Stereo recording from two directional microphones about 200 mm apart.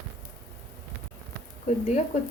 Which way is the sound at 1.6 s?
35° left (ahead or behind).